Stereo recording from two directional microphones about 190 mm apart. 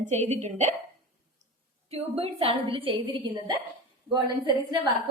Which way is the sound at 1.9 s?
30° right (ahead or behind).